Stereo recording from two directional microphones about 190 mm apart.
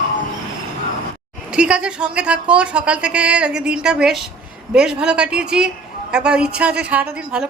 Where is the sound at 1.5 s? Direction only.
5° right (ahead or behind).